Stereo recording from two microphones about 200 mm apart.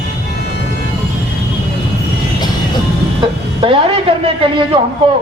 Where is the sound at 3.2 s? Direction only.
25° right (ahead or behind).